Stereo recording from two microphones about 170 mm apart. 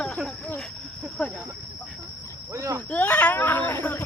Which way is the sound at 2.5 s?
20° right (ahead or behind).